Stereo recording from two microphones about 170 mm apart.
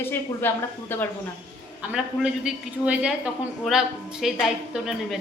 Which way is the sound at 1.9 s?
5° right (ahead or behind).